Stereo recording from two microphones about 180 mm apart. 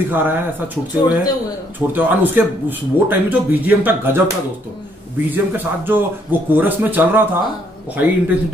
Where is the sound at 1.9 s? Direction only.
10° right (ahead or behind).